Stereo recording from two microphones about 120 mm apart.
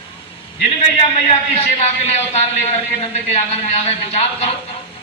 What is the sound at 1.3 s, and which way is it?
A man's voice, 55° left (ahead or behind).